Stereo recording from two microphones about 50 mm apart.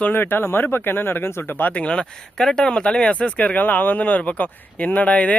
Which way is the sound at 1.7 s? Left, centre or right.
Left.